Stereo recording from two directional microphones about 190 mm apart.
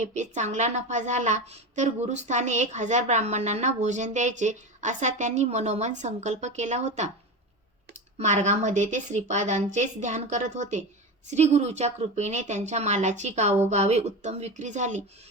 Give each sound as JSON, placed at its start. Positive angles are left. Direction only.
{"t": 0.0, "sound": "a woman's voice", "side_deg": -40}
{"t": 8.2, "sound": "a woman's voice", "side_deg": -40}